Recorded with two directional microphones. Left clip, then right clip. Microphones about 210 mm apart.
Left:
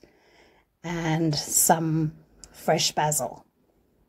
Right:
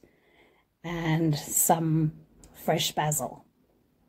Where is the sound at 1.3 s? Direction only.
40° left (ahead or behind).